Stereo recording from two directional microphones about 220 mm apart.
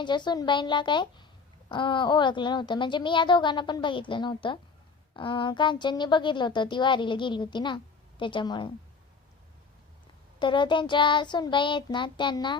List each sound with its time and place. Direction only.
0.0 s a woman's voice: 20° left (ahead or behind)
10.4 s a woman's voice: 20° left (ahead or behind)